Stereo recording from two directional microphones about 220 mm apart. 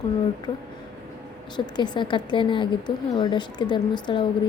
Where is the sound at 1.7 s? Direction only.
20° left (ahead or behind).